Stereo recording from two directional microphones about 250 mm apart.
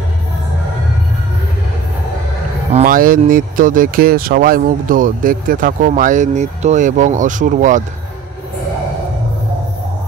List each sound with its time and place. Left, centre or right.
2.7 s speech: right